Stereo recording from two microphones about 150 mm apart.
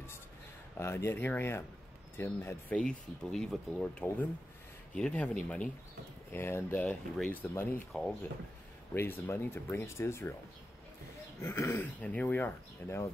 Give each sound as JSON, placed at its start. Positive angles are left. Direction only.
{"t": 0.7, "sound": "speech", "side_deg": 15}
{"t": 8.9, "sound": "speech", "side_deg": 15}
{"t": 11.4, "sound": "speech", "side_deg": 15}